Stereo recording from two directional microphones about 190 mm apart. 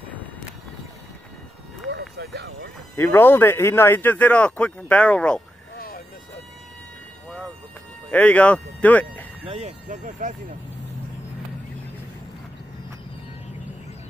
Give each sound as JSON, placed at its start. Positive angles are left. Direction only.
{"t": 2.0, "sound": "vehicle", "side_deg": -60}
{"t": 3.0, "sound": "a man's voice", "side_deg": 10}
{"t": 5.8, "sound": "vehicle", "side_deg": 50}
{"t": 8.1, "sound": "speech", "side_deg": 5}
{"t": 9.5, "sound": "speech", "side_deg": -35}